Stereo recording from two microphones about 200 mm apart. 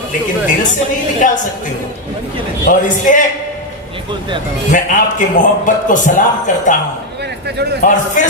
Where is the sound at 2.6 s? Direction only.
40° left (ahead or behind).